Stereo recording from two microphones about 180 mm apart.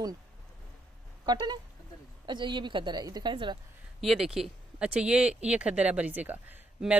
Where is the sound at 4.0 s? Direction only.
Centre (ahead or behind).